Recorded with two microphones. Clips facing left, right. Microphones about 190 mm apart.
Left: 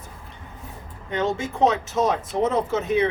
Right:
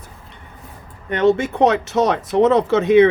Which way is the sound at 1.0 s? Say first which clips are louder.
Right 9 dB; 65° right (ahead or behind).